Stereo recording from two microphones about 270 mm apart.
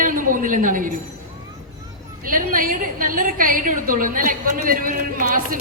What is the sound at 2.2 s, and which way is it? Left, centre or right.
A woman's voice, right.